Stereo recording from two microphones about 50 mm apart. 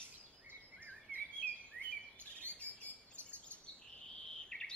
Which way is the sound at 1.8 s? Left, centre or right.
Left.